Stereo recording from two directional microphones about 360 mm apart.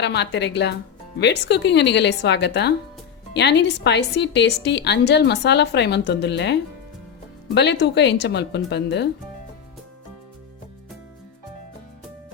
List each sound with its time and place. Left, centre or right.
0.0 s a woman's voice: left